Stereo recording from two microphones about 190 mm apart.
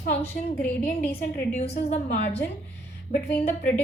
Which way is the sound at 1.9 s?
35° left (ahead or behind).